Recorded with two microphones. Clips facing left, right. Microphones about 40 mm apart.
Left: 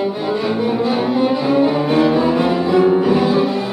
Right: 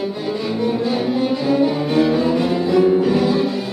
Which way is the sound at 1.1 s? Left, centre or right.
Centre.